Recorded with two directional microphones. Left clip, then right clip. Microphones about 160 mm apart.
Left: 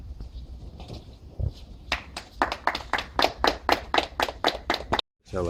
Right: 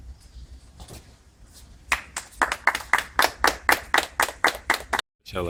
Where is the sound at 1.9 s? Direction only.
20° right (ahead or behind).